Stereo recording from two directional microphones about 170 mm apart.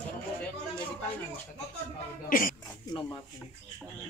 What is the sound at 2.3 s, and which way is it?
Speech, 55° left (ahead or behind).